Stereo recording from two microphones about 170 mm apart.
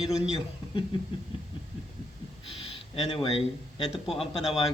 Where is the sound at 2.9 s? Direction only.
35° left (ahead or behind).